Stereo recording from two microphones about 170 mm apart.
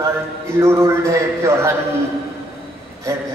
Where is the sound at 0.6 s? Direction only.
15° right (ahead or behind).